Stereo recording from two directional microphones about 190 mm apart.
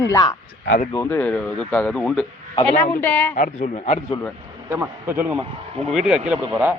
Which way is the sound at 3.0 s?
10° left (ahead or behind).